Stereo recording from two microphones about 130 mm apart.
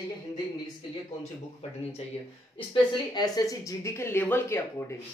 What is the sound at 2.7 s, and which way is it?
Speech, 30° left (ahead or behind).